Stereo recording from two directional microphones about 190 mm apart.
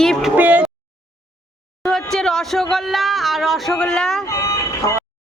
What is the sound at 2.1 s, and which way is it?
A man's voice, centre (ahead or behind).